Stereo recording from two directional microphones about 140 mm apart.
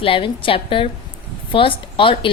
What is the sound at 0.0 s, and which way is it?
A woman's voice, 40° left (ahead or behind).